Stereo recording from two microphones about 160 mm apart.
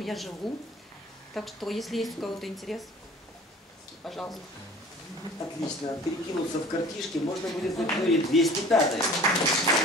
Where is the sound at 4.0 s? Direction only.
Centre (ahead or behind).